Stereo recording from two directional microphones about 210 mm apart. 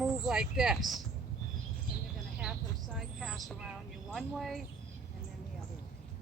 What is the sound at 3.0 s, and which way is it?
Speech, centre (ahead or behind).